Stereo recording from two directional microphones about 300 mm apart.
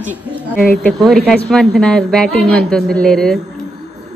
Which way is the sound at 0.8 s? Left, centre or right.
Centre.